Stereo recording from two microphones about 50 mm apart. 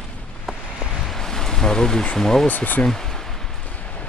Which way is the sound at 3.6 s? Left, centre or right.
Left.